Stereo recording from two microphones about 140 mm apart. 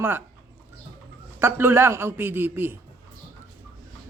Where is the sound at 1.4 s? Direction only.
15° right (ahead or behind).